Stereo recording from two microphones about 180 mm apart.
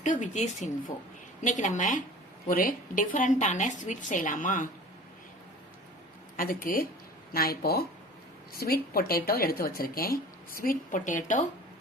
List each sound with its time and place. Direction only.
0.0 s speech: 45° left (ahead or behind)
6.3 s speech: 50° left (ahead or behind)